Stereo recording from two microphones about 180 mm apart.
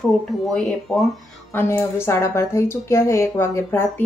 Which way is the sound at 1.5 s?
15° left (ahead or behind).